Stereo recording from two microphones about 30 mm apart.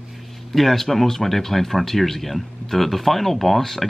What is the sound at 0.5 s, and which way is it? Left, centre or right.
Speech, centre.